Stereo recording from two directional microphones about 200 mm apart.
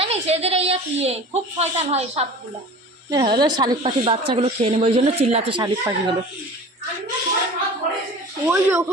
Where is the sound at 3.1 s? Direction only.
20° right (ahead or behind).